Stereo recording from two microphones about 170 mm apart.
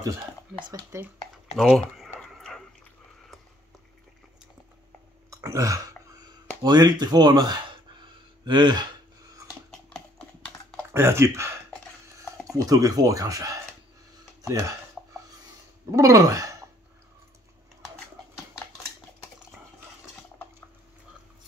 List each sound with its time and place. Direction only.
0.0 s speech: 20° right (ahead or behind)
1.6 s speech: centre (ahead or behind)
2.0 s whispering: 5° left (ahead or behind)
5.3 s a sound: 20° right (ahead or behind)
9.7 s horse: 5° left (ahead or behind)
10.9 s speech: 15° right (ahead or behind)
15.9 s speech: 20° right (ahead or behind)
18.5 s typewriter: 20° left (ahead or behind)